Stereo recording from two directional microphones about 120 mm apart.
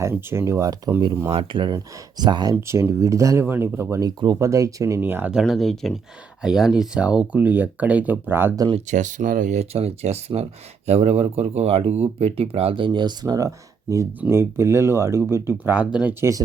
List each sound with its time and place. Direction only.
0.1 s speech: 20° right (ahead or behind)
1.3 s speech: 45° right (ahead or behind)
2.6 s speech: 20° right (ahead or behind)
5.3 s speech: centre (ahead or behind); by 8.5 s 20° right (ahead or behind)
8.9 s speech: 90° right; by 13.5 s 30° right (ahead or behind)
14.2 s speech: 20° right (ahead or behind)